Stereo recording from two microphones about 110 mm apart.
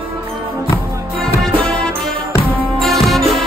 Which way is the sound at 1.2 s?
10° left (ahead or behind).